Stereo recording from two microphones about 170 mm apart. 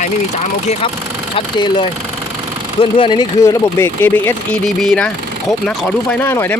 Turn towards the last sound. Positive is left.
turn(degrees=5)  # may be behind; listen again after turning